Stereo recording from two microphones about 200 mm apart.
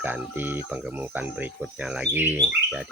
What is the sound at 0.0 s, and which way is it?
Speech, 10° right (ahead or behind).